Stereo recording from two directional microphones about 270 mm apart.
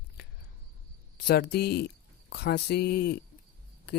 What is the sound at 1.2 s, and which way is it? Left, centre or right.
Speech, left.